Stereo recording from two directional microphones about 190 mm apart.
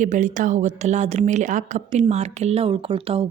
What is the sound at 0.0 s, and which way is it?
Speech, 40° right (ahead or behind).